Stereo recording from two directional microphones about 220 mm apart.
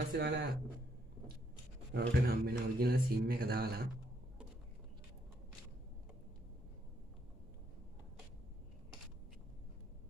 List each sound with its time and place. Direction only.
0.1 s speech: 45° right (ahead or behind)
1.9 s speech: 45° right (ahead or behind)